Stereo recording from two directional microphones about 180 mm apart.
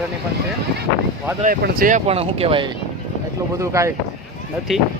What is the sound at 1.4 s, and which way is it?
Speech, 50° right (ahead or behind).